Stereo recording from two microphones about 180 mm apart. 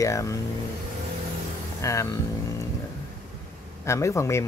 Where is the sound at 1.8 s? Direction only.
15° left (ahead or behind).